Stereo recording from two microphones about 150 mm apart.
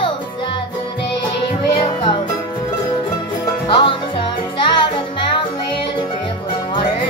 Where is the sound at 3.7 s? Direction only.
35° left (ahead or behind).